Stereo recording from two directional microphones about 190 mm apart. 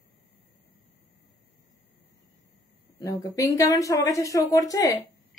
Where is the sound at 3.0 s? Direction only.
15° left (ahead or behind).